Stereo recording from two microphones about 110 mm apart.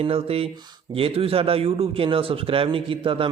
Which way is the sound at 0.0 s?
60° right (ahead or behind).